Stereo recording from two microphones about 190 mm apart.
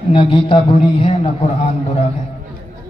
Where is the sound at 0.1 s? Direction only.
25° left (ahead or behind).